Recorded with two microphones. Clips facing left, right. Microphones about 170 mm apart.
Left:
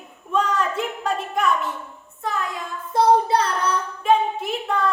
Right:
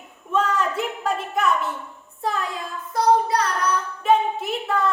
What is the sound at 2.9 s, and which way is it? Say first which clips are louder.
Child singing: left 2 dB; 25° left (ahead or behind).